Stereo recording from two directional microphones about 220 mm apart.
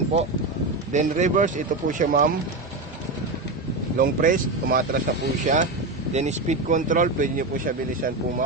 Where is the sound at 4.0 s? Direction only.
40° right (ahead or behind).